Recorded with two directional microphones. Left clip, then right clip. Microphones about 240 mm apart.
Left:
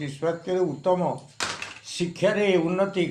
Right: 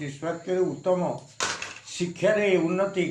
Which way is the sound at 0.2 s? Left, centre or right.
Left.